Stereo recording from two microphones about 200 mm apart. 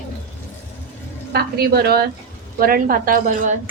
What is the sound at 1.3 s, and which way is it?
A woman's voice, 50° right (ahead or behind).